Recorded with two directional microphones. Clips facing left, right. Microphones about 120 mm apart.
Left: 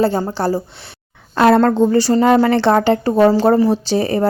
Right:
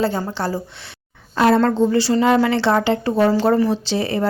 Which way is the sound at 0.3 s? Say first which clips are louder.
Left 5 dB; 40° left (ahead or behind).